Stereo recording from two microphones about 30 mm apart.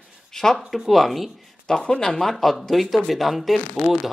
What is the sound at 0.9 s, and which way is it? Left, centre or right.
Speech, centre.